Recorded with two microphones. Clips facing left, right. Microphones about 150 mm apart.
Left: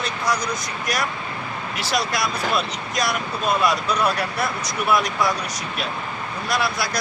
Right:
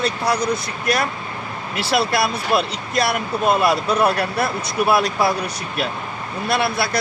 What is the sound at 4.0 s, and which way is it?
Speech, 60° right (ahead or behind).